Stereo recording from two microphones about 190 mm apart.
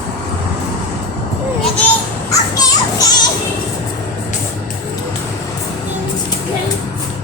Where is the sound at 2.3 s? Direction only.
20° left (ahead or behind).